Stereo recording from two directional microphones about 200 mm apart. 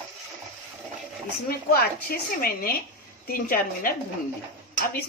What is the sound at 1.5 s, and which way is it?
A woman's voice, 50° left (ahead or behind).